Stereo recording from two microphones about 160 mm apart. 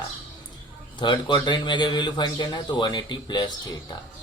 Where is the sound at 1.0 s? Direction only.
30° left (ahead or behind).